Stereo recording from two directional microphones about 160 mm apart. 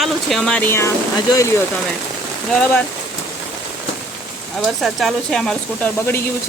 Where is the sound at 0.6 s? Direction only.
15° left (ahead or behind).